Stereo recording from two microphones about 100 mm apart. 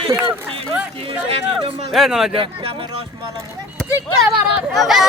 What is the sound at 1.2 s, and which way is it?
Speech, 80° right.